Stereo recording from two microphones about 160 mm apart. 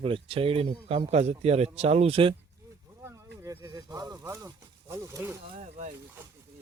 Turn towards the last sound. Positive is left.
turn(degrees=-20)  # may be behind; listen again after turning